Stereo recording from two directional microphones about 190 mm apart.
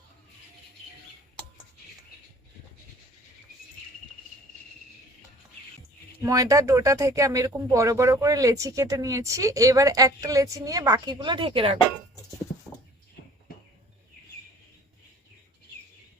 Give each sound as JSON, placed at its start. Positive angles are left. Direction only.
{"t": 6.1, "sound": "speech", "side_deg": -15}